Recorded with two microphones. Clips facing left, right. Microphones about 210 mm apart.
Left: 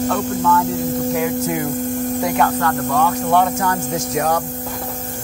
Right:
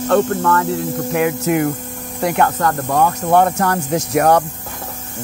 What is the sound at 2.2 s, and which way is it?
Speech, 55° right (ahead or behind).